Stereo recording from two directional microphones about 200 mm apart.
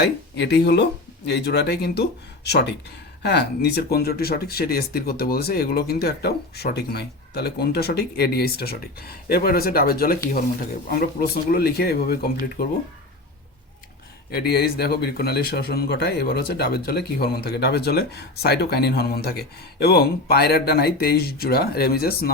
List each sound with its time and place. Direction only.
0.0 s speech: 60° left (ahead or behind)
14.3 s speech: 50° left (ahead or behind)